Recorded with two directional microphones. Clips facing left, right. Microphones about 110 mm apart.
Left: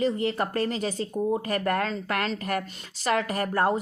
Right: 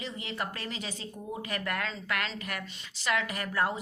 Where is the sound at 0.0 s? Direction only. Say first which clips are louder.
Left 11 dB; 45° left (ahead or behind).